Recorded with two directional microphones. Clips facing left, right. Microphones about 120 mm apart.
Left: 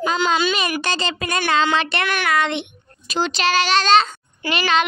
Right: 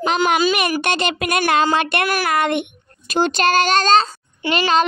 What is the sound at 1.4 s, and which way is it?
Child singing, 45° right (ahead or behind).